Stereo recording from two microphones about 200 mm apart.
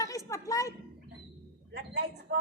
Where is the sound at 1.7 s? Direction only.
55° right (ahead or behind).